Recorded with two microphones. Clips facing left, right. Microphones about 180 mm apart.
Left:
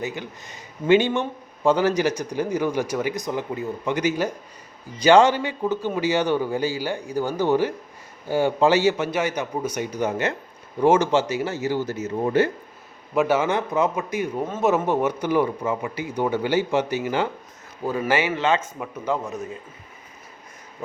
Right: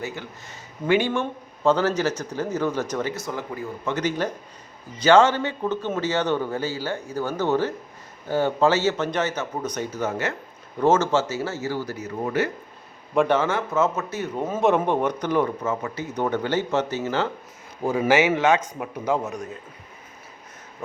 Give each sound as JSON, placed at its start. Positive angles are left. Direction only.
{"t": 0.0, "sound": "speech", "side_deg": 15}
{"t": 13.1, "sound": "speech", "side_deg": 5}
{"t": 14.4, "sound": "speech", "side_deg": 0}
{"t": 15.0, "sound": "speech", "side_deg": 10}
{"t": 18.1, "sound": "a man's voice", "side_deg": -10}